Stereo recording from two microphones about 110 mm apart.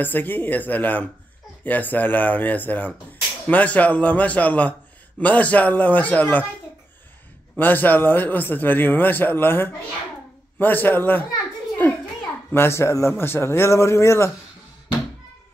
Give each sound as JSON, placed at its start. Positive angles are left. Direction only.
{"t": 0.0, "sound": "speech", "side_deg": 15}
{"t": 7.5, "sound": "speech", "side_deg": 15}
{"t": 12.5, "sound": "a man's voice", "side_deg": 25}